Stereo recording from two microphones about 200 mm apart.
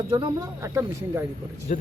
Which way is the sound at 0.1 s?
20° right (ahead or behind).